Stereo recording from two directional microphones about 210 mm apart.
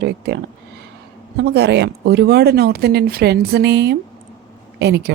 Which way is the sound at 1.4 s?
50° right (ahead or behind).